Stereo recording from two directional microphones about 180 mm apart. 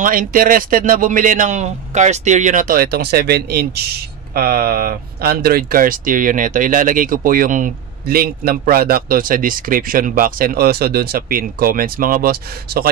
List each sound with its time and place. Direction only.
0.0 s a man's voice: 50° right (ahead or behind)